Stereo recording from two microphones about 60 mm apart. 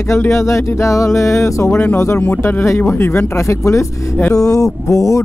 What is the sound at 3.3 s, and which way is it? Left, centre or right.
Speech, left.